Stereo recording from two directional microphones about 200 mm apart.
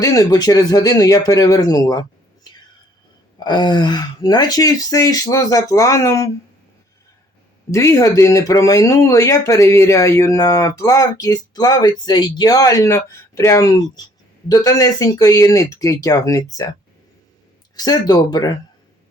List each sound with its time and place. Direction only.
0.0 s speech: 15° left (ahead or behind)
7.7 s speech: 15° left (ahead or behind)
17.7 s speech: 20° left (ahead or behind)